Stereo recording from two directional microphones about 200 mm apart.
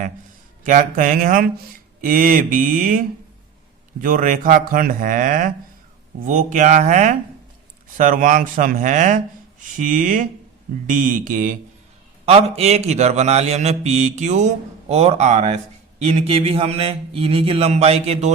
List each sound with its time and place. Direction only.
0.6 s a man's voice: 40° right (ahead or behind)
4.0 s a man's voice: 40° right (ahead or behind)
12.2 s a man's voice: 30° right (ahead or behind)
16.1 s mantra: 30° right (ahead or behind)